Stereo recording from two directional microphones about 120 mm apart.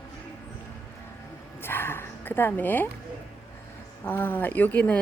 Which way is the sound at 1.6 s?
20° left (ahead or behind).